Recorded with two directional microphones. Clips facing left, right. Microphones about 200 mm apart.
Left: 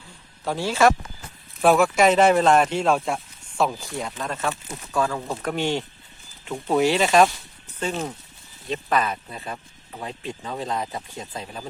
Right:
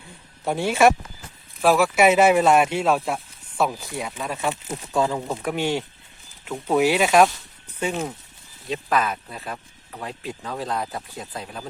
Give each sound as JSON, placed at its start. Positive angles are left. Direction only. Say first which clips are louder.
{"t": 0.4, "sound": "speech", "louder": "right 2 dB", "side_deg": -20}
{"t": 1.6, "sound": "speech", "louder": "even", "side_deg": 0}
{"t": 5.3, "sound": "speech", "louder": "right 1 dB", "side_deg": -5}
{"t": 8.6, "sound": "speech", "louder": "even", "side_deg": 0}